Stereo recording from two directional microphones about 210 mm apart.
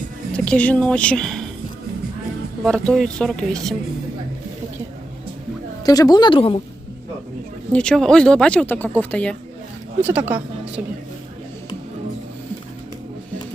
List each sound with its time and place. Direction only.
0.3 s a woman's voice: 5° left (ahead or behind)
2.6 s speech: 5° left (ahead or behind)
5.8 s speech: 15° left (ahead or behind)
7.7 s speech: 5° left (ahead or behind)
10.0 s speech: 10° right (ahead or behind)